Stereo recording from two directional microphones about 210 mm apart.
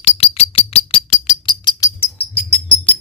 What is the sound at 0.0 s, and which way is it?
Bird, 30° left (ahead or behind).